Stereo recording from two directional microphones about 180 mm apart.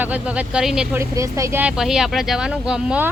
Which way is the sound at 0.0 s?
10° right (ahead or behind).